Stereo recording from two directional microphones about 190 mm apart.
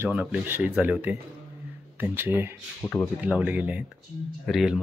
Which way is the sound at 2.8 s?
10° left (ahead or behind).